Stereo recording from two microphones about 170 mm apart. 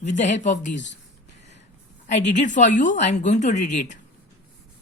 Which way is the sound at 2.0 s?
90° left.